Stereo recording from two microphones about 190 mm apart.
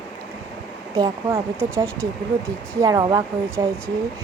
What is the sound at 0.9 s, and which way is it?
Speech, 15° right (ahead or behind).